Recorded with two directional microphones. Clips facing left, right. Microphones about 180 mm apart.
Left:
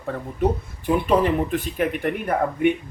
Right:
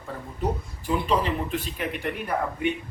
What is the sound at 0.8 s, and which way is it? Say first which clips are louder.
Speech: left 6 dB; 55° left (ahead or behind).